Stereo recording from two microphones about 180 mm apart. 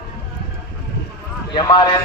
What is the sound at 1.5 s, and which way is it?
Speech, 25° left (ahead or behind).